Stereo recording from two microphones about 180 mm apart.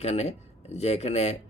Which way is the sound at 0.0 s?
35° left (ahead or behind).